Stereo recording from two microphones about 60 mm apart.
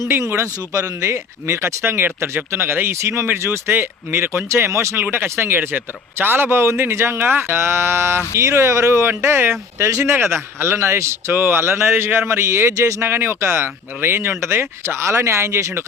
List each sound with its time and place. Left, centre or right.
0.1 s a man's voice: right
0.7 s speech: right
5.1 s a man's voice: right
9.8 s speech: right
12.7 s speech: right
13.1 s speech: right